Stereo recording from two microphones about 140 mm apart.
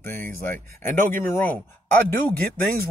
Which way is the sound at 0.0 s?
15° left (ahead or behind).